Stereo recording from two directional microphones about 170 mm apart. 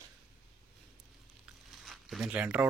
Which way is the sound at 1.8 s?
Centre (ahead or behind).